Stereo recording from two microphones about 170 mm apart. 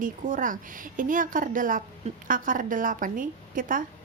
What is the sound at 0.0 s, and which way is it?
A woman's voice, 50° right (ahead or behind).